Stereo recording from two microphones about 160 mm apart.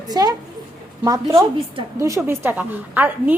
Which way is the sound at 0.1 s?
25° right (ahead or behind).